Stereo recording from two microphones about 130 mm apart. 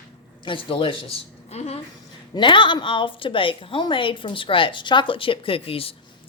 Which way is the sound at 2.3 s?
35° left (ahead or behind).